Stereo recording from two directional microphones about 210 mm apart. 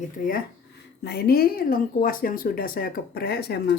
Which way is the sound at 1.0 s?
50° left (ahead or behind).